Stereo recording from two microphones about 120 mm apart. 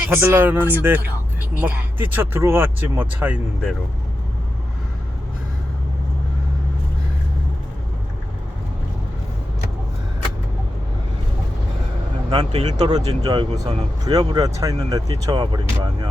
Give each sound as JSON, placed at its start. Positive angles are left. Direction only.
{"t": 0.1, "sound": "speech", "side_deg": -20}
{"t": 12.3, "sound": "speech", "side_deg": -40}